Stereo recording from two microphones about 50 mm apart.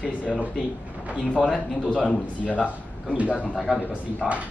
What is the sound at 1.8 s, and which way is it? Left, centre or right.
Speech, left.